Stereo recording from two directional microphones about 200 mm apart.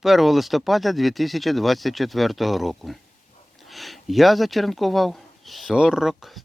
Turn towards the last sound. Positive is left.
turn(degrees=0)  # may be behind; listen again after turning